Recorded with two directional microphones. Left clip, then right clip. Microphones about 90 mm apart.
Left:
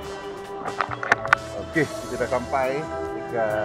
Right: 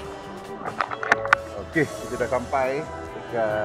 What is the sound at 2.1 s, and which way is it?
Speech, 20° left (ahead or behind).